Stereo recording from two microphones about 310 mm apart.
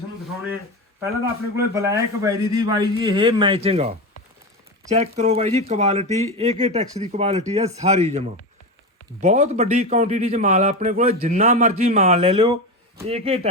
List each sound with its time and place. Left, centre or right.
1.5 s a man's voice: centre